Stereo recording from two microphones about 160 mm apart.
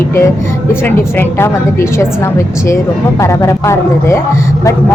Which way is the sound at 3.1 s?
20° left (ahead or behind).